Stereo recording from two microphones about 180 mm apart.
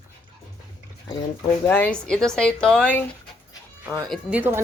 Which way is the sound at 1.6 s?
10° left (ahead or behind).